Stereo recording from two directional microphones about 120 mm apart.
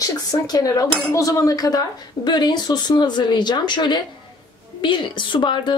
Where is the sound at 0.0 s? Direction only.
30° left (ahead or behind).